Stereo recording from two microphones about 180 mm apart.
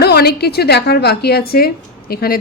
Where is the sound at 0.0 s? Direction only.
60° left (ahead or behind).